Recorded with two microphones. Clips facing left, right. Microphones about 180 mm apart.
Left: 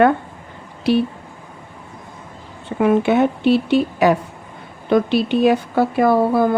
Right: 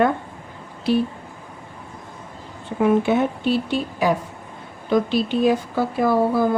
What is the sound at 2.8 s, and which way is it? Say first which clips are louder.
A woman's voice: left 3 dB; 75° left (ahead or behind).